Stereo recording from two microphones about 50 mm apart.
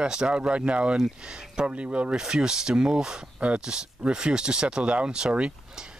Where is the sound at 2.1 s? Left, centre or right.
Centre.